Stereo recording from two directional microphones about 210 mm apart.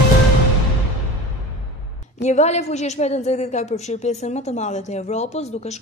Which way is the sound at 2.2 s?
35° left (ahead or behind).